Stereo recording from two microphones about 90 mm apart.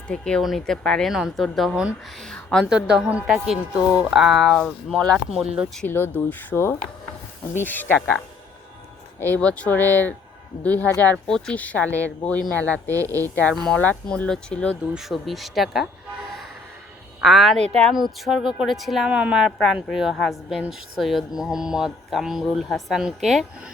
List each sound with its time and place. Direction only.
0.1 s a woman's voice: 10° left (ahead or behind)
2.6 s a woman's voice: 10° right (ahead or behind); by 5.2 s 10° left (ahead or behind)
5.3 s a woman's voice: 5° right (ahead or behind)
5.8 s speech: 25° left (ahead or behind)
9.2 s speech: 15° left (ahead or behind)
12.9 s speech: 35° right (ahead or behind)
13.2 s speech: 20° left (ahead or behind)
13.5 s speech: 5° left (ahead or behind)
14.9 s a woman's voice: centre (ahead or behind)
17.2 s a woman's voice: centre (ahead or behind)
17.9 s a woman's voice: 5° right (ahead or behind)